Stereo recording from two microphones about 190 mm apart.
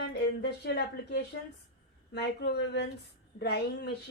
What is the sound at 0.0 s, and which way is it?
Speech, 60° left (ahead or behind).